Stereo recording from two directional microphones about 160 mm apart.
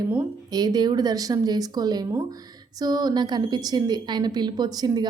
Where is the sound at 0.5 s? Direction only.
25° right (ahead or behind).